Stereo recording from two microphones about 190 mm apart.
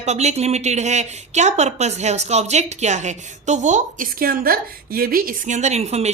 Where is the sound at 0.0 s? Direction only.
35° right (ahead or behind).